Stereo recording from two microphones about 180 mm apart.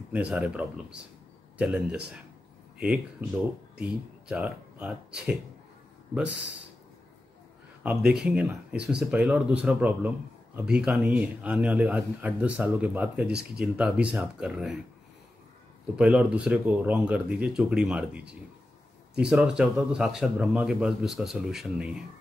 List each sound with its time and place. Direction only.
0.1 s a man's voice: 5° right (ahead or behind)
7.8 s a man's voice: 5° right (ahead or behind)
16.0 s a man's voice: 5° right (ahead or behind)